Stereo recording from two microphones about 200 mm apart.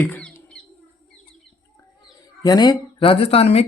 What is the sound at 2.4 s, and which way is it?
Speech, 20° left (ahead or behind).